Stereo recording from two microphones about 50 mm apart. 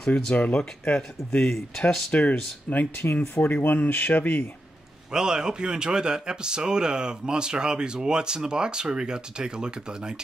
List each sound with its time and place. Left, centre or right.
0.1 s speech: left
2.1 s speech: left
3.0 s speech: left
5.1 s speech: centre